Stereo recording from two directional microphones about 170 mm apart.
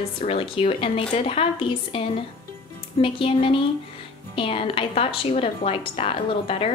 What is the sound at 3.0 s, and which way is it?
A woman's voice, 30° left (ahead or behind).